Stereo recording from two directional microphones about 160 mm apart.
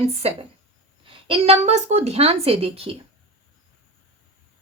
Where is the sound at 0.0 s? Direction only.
40° right (ahead or behind).